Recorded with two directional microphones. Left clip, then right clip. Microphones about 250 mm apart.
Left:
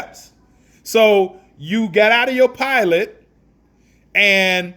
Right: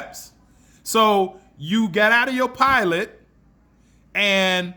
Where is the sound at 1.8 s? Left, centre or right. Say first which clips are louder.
Left 5 dB; right.